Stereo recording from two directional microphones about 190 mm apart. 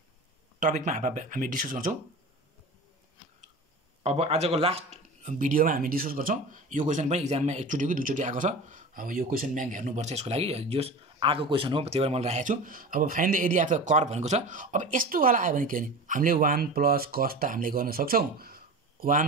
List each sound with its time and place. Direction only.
0.6 s speech: 40° right (ahead or behind)
4.0 s speech: 35° right (ahead or behind)